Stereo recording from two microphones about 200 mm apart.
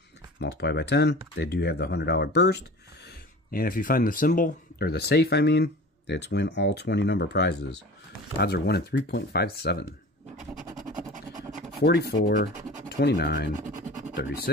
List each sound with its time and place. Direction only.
0.4 s speech: 55° left (ahead or behind)
3.5 s speech: 45° left (ahead or behind)
10.9 s a sound: 40° right (ahead or behind)
11.8 s speech: 55° left (ahead or behind)
13.6 s scratch: 40° right (ahead or behind)